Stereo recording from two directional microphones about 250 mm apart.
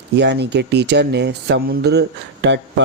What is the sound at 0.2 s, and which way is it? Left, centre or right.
A man's voice, right.